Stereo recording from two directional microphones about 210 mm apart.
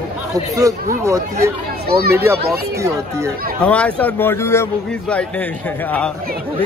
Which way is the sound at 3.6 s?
5° left (ahead or behind).